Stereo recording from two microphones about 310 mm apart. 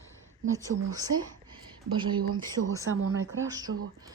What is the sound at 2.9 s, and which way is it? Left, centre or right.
Speech, right.